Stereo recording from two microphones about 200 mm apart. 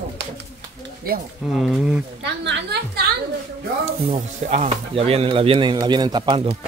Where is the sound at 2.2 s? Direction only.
55° right (ahead or behind).